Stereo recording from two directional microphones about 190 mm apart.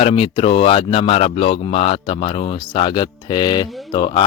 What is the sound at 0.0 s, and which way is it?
Speech, 30° left (ahead or behind).